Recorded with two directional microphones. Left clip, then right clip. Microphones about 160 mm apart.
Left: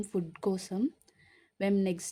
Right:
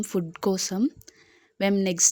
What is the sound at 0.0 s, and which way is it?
A woman's voice, 20° right (ahead or behind).